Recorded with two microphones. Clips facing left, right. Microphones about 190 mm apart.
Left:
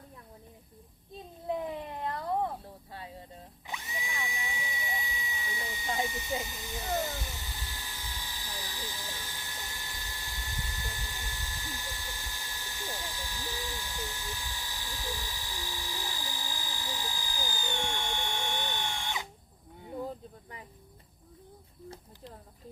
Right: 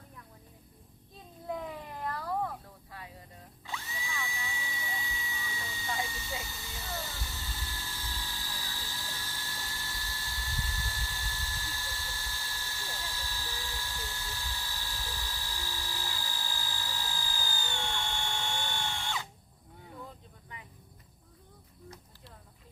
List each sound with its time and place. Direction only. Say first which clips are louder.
1.5 s a sound: left 4 dB; 20° left (ahead or behind)
3.7 s drill: left 1 dB; 15° left (ahead or behind)
20.0 s snake: left 12 dB; 35° left (ahead or behind)